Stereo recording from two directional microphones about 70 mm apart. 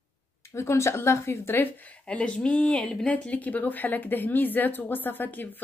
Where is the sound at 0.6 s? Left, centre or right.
Left.